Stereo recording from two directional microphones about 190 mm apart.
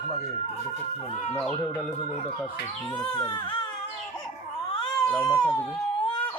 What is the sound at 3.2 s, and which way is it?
Speech, 25° left (ahead or behind).